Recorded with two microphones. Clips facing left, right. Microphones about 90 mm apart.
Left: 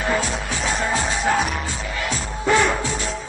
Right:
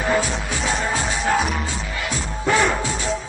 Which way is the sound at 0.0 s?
Centre (ahead or behind).